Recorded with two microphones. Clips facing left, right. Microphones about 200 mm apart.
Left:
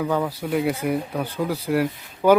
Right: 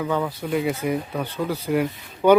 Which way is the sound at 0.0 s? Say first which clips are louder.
Left 1 dB; 5° left (ahead or behind).